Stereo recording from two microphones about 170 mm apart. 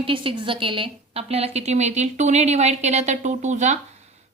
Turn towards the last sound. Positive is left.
turn(degrees=-40)  # may be behind; listen again after turning